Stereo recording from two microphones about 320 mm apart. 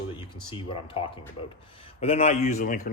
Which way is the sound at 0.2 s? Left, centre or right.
Centre.